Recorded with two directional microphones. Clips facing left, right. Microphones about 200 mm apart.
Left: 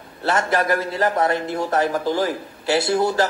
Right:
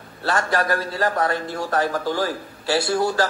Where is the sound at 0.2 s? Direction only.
25° left (ahead or behind).